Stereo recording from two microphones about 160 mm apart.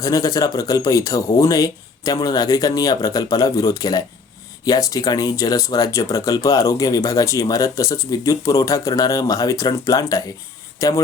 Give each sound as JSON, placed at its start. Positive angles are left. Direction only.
{"t": 0.0, "sound": "a man's voice", "side_deg": 20}